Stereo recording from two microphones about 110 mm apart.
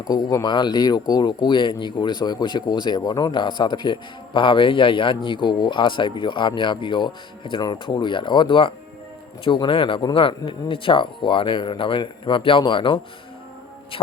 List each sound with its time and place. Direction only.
0.1 s speech: 35° left (ahead or behind)